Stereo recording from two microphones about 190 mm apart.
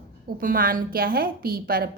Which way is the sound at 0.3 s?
50° right (ahead or behind).